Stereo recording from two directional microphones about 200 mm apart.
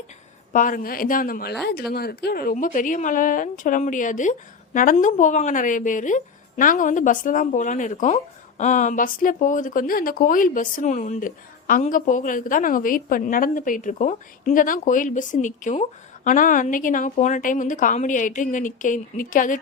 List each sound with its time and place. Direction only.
0.5 s speech: 45° left (ahead or behind)